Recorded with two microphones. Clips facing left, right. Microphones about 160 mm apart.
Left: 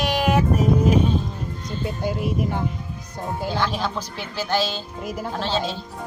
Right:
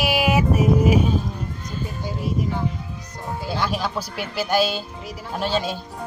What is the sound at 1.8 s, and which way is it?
Speech, 65° left (ahead or behind).